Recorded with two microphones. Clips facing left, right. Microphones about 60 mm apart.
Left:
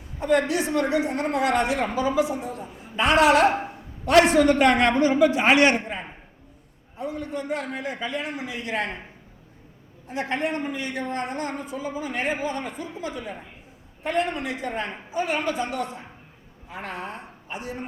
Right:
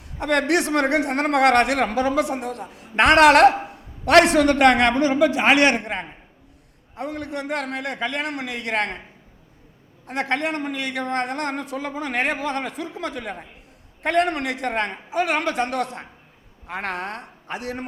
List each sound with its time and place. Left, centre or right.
0.0 s a man's voice: right
3.5 s a sound: centre
4.0 s a man's voice: right
10.1 s a man's voice: right